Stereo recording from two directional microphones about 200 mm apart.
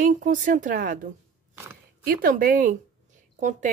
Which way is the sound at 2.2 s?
45° right (ahead or behind).